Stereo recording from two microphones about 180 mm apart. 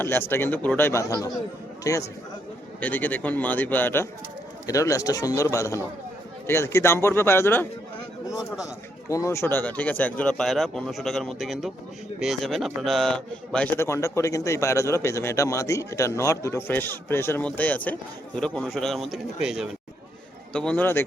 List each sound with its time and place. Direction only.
0.0 s a man's voice: 10° left (ahead or behind)